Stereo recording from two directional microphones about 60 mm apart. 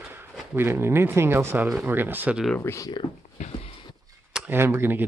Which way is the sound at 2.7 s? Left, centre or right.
Left.